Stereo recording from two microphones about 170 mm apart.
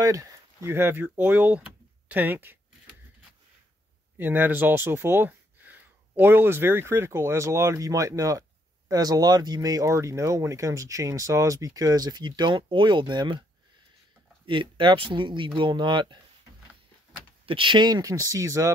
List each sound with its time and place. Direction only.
0.0 s speech: 20° right (ahead or behind)
4.2 s speech: 10° right (ahead or behind); by 13.4 s 25° right (ahead or behind)
14.5 s speech: 30° right (ahead or behind)
17.5 s speech: 30° right (ahead or behind)